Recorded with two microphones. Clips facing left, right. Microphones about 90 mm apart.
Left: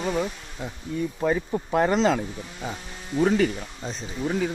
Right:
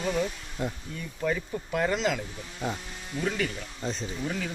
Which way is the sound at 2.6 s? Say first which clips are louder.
Right 2 dB; centre (ahead or behind).